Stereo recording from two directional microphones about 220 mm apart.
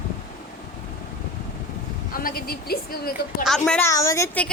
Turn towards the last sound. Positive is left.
turn(degrees=10)  # may be behind; listen again after turning